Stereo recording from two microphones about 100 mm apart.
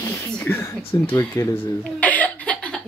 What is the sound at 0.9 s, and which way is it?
Speech, 35° left (ahead or behind).